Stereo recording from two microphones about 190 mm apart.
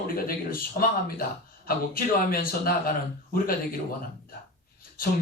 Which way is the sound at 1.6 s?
50° left (ahead or behind).